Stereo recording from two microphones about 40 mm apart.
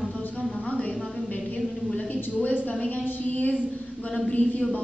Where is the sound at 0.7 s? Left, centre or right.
Left.